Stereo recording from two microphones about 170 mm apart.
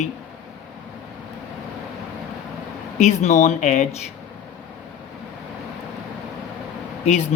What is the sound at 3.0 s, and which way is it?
Speech, 45° left (ahead or behind).